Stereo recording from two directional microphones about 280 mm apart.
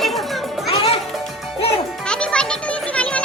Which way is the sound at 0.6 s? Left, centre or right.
Left.